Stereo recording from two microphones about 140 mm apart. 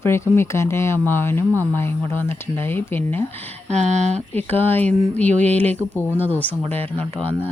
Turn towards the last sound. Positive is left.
turn(degrees=15)  # may be behind; listen again after turning